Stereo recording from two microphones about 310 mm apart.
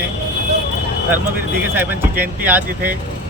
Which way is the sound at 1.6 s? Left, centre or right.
Centre.